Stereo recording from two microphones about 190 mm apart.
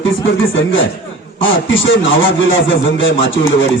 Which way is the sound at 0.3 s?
85° left.